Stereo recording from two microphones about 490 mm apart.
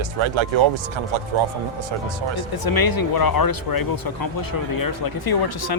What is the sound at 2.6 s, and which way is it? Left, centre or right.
Speech, left.